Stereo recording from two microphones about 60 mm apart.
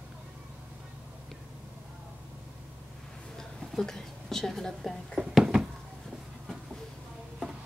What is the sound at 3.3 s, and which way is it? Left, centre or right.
A woman's voice, centre.